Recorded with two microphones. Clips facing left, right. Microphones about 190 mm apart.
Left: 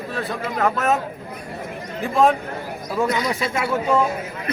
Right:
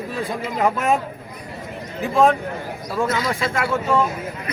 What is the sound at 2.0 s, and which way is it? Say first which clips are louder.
Speech: right 1 dB; centre (ahead or behind).